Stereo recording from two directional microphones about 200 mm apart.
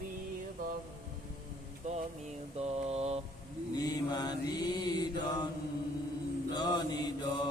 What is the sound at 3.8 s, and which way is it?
Mantra, 20° left (ahead or behind).